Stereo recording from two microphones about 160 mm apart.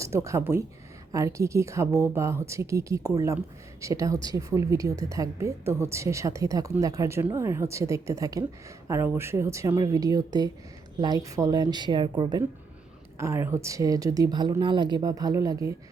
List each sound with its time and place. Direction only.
0.0 s a woman's voice: 20° right (ahead or behind)